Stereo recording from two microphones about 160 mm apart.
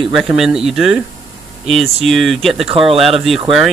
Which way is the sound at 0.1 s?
5° right (ahead or behind).